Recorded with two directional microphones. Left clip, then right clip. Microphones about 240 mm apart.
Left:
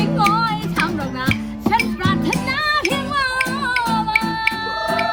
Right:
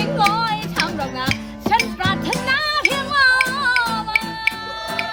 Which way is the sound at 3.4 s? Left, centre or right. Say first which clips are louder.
Right 2 dB; centre.